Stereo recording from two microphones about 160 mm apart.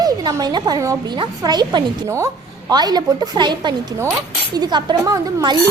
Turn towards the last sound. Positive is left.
turn(degrees=-20)  # may be behind; listen again after turning